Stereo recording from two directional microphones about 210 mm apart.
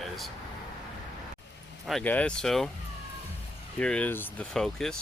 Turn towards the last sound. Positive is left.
turn(degrees=0)  # may be behind; listen again after turning